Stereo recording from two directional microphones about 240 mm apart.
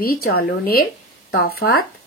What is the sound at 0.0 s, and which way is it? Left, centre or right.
Speech, left.